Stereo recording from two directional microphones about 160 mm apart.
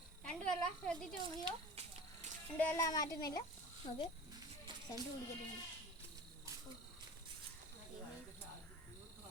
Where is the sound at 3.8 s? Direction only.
45° left (ahead or behind).